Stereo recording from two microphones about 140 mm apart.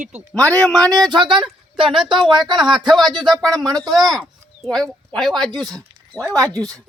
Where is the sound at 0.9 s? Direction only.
30° right (ahead or behind).